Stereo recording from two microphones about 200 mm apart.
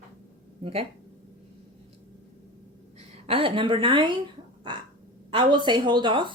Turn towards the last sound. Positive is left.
turn(degrees=-25)  # may be behind; listen again after turning